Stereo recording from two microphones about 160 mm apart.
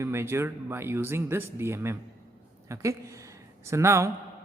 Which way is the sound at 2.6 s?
20° right (ahead or behind).